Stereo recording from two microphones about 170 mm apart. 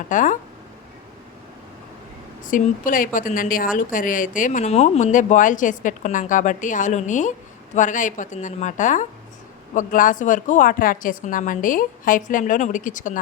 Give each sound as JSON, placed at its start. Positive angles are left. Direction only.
{"t": 0.1, "sound": "speech", "side_deg": 50}
{"t": 2.5, "sound": "speech", "side_deg": 55}